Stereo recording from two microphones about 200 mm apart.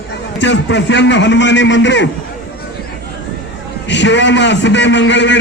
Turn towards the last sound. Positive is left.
turn(degrees=65)  # may be behind; listen again after turning